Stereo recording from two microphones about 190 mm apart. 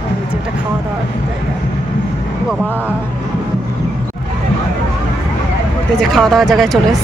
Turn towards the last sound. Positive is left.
turn(degrees=0)  # may be behind; listen again after turning